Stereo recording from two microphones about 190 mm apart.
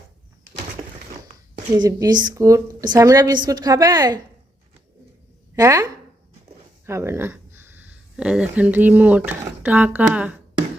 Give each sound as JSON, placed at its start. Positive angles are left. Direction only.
{"t": 1.7, "sound": "a woman's voice", "side_deg": -20}
{"t": 5.5, "sound": "speech", "side_deg": -15}